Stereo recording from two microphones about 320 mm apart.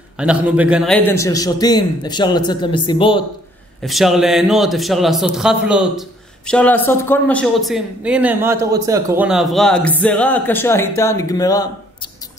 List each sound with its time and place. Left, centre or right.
0.2 s a man's voice: centre
3.8 s a man's voice: centre